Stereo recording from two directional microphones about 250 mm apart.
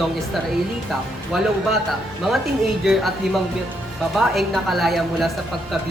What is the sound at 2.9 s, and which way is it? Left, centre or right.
A woman's voice, centre.